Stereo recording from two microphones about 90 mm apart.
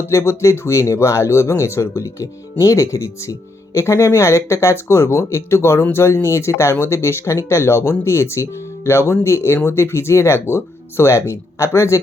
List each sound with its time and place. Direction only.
0.1 s speech: 30° left (ahead or behind)